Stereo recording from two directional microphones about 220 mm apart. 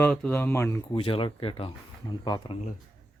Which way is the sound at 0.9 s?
25° left (ahead or behind).